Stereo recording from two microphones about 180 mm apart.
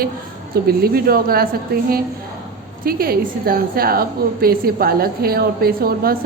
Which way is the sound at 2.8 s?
55° right (ahead or behind).